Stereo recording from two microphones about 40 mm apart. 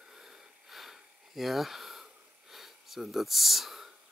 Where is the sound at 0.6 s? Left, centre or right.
Centre.